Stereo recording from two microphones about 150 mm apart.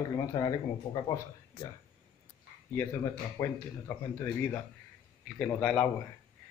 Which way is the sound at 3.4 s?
20° left (ahead or behind).